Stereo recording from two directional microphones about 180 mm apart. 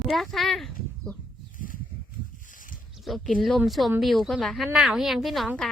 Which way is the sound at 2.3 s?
45° left (ahead or behind).